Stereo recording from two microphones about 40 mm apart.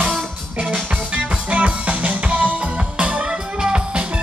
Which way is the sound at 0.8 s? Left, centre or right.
Right.